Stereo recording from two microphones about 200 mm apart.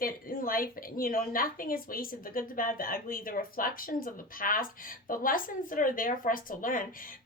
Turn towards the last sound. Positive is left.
turn(degrees=45)  # may be behind; listen again after turning